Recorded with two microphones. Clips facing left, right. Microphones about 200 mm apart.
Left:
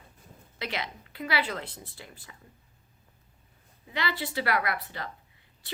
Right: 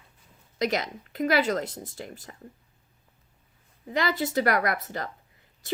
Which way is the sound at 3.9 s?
45° right (ahead or behind).